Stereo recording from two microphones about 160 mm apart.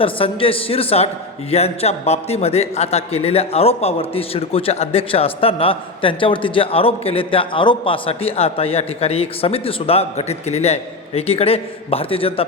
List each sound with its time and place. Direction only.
0.0 s a man's voice: 35° left (ahead or behind)